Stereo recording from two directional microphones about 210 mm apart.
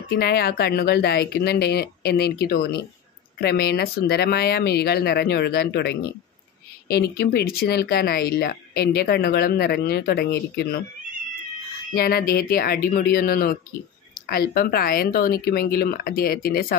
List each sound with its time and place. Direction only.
0.1 s speech: 50° left (ahead or behind)
11.9 s speech: 45° left (ahead or behind)